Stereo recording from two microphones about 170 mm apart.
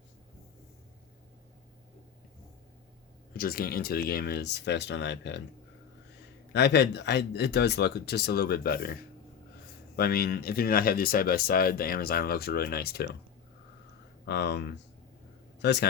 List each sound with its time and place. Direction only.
3.3 s speech: 60° left (ahead or behind); by 5.4 s 90° left
6.5 s speech: 85° left; by 13.1 s 65° left (ahead or behind)
14.3 s speech: 75° left (ahead or behind)